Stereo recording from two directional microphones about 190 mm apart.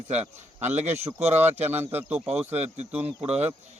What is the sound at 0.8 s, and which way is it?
Speech, 35° right (ahead or behind).